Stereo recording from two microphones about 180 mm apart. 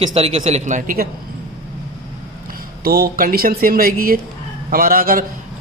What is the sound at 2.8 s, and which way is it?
A man's voice, 55° right (ahead or behind).